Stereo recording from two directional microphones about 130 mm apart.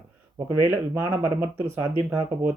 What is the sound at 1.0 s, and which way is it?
Speech, 20° right (ahead or behind).